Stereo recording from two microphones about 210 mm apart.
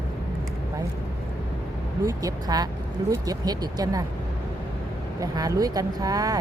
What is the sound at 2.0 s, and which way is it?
Speech, 15° right (ahead or behind).